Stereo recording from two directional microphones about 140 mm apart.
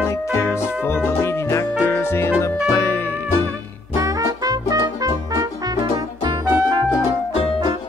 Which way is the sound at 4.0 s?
25° right (ahead or behind).